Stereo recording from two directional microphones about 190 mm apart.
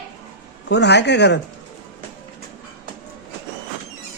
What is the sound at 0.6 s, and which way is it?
Speech, 65° left (ahead or behind).